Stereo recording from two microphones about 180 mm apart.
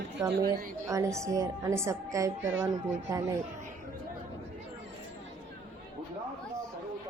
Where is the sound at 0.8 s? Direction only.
15° right (ahead or behind).